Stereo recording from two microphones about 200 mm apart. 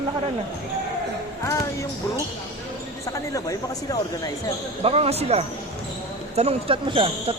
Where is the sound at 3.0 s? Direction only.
15° left (ahead or behind).